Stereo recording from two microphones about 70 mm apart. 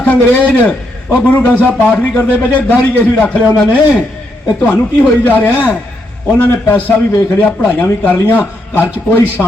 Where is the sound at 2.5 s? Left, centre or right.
Left.